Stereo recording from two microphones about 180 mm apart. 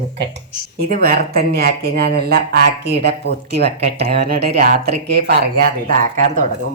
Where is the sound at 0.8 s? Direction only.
55° right (ahead or behind).